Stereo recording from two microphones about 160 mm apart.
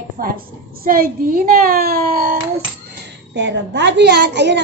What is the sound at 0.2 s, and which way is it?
A woman's voice, 65° right (ahead or behind).